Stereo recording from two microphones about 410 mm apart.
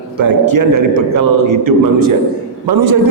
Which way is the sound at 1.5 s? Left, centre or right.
Right.